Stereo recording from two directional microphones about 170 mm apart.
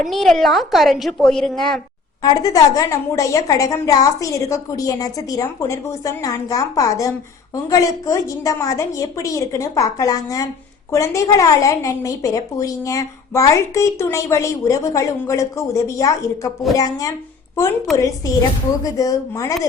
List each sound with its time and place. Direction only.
0.0 s a woman's voice: centre (ahead or behind)
2.2 s a woman's voice: 20° left (ahead or behind)
17.9 s a woman's voice: centre (ahead or behind)
18.8 s a woman's voice: 20° left (ahead or behind)